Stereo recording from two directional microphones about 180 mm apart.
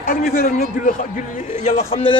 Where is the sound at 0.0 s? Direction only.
55° left (ahead or behind).